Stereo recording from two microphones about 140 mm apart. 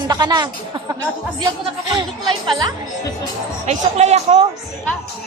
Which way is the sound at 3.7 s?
50° right (ahead or behind).